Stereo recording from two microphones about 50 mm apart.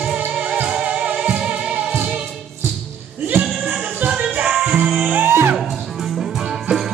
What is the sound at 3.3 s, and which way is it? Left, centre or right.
Music, right.